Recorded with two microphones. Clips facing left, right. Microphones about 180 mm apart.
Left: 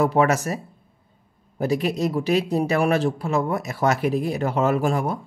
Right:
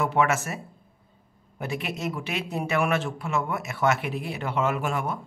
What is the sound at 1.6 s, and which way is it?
Speech, 35° left (ahead or behind).